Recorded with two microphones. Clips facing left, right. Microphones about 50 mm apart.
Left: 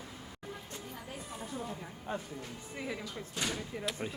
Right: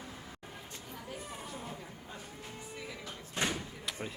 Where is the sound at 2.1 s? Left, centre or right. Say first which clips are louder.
Left 12 dB; left.